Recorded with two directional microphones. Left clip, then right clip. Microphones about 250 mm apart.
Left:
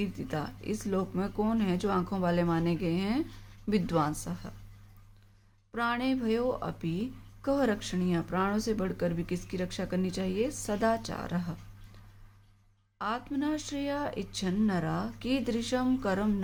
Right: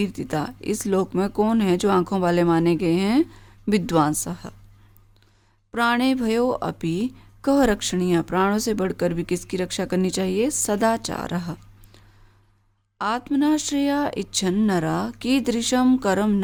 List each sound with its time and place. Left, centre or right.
0.0 s speech: right
5.7 s speech: right
13.0 s speech: right